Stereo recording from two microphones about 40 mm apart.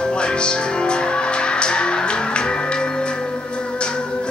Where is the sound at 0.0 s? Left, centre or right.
Left.